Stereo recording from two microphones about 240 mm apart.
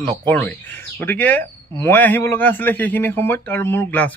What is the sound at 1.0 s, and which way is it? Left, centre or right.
Speech, centre.